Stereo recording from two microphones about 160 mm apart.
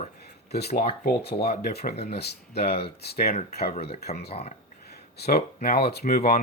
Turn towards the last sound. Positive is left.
turn(degrees=70)  # may be behind; listen again after turning